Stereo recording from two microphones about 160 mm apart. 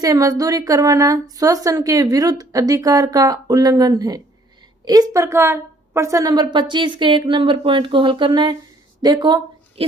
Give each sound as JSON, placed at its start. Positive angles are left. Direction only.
{"t": 0.0, "sound": "a woman's voice", "side_deg": -20}